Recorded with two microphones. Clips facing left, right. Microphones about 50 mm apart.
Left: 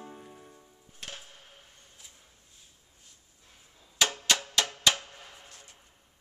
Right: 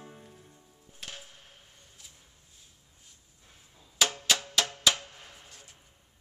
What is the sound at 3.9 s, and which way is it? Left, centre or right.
Music, centre.